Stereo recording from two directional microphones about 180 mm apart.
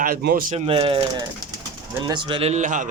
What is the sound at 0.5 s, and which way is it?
Speech, 35° right (ahead or behind).